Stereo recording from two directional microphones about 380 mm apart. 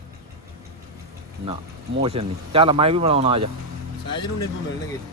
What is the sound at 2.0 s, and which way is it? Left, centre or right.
A man's voice, centre.